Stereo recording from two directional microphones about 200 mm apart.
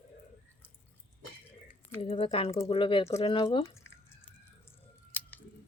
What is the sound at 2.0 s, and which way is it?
A woman's voice, 30° left (ahead or behind).